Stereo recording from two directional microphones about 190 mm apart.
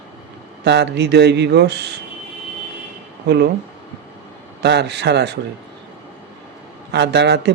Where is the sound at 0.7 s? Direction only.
65° right (ahead or behind).